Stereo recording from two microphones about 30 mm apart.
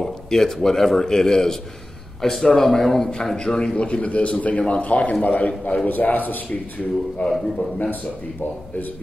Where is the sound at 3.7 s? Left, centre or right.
Left.